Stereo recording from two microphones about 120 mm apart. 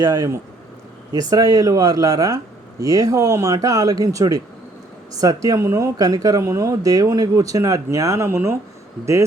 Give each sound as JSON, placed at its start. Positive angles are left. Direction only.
{"t": 0.0, "sound": "speech", "side_deg": -30}